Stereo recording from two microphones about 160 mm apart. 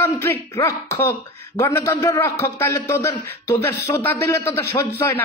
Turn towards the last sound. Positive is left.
turn(degrees=15)  # may be behind; listen again after turning